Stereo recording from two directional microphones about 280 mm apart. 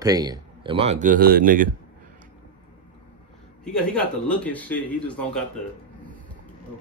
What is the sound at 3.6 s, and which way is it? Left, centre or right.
Speech, centre.